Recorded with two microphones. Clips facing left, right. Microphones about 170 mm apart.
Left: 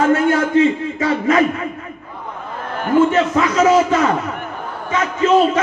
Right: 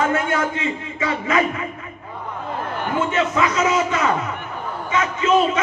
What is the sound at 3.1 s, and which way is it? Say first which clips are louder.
Speech: left 4 dB; 35° left (ahead or behind).